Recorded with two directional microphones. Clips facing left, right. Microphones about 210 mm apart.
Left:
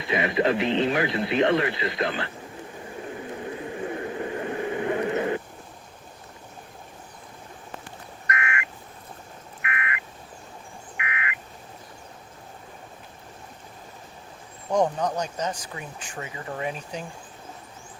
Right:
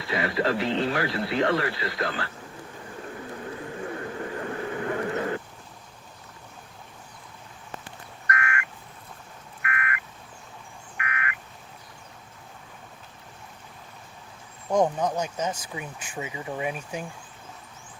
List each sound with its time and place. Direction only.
0.0 s speech: 20° left (ahead or behind)
3.0 s vehicle: 20° left (ahead or behind)
8.3 s frog: 20° left (ahead or behind)
9.6 s a sound: 20° left (ahead or behind)
14.7 s speech: 5° right (ahead or behind)